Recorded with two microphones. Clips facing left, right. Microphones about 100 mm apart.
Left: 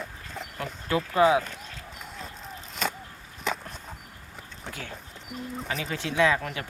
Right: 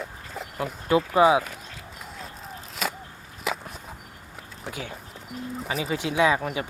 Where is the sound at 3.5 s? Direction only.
5° right (ahead or behind).